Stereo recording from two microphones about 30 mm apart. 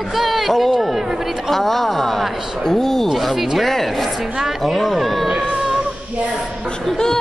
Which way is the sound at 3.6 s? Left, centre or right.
Centre.